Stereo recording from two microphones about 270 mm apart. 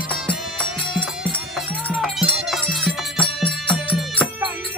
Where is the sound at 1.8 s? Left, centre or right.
Centre.